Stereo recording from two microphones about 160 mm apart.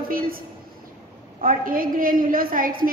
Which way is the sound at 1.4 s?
60° right (ahead or behind).